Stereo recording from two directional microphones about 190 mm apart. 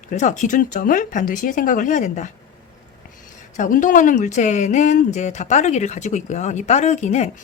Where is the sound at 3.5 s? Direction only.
40° left (ahead or behind).